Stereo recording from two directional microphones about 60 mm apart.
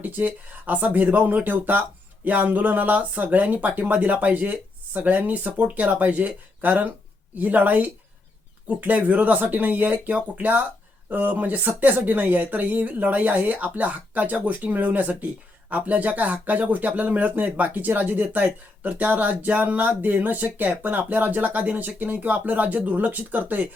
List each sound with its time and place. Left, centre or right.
0.0 s speech: right